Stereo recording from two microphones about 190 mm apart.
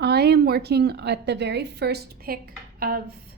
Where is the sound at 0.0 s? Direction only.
60° right (ahead or behind).